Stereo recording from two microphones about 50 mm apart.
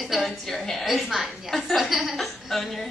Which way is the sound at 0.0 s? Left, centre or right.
Centre.